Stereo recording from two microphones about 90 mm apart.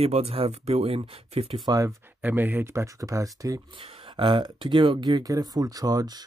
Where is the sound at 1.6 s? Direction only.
45° right (ahead or behind).